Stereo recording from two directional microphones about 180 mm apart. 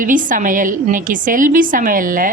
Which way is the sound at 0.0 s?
45° right (ahead or behind).